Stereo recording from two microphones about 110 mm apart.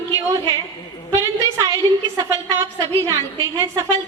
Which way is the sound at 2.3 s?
30° right (ahead or behind).